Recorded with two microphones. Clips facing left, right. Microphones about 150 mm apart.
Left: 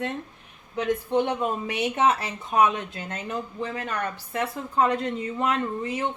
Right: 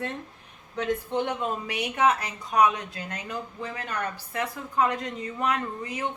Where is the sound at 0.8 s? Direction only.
15° left (ahead or behind).